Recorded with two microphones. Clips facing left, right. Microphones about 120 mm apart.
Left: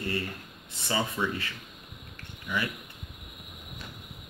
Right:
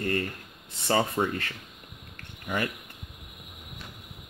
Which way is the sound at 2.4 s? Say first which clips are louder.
Right 2 dB; 45° right (ahead or behind).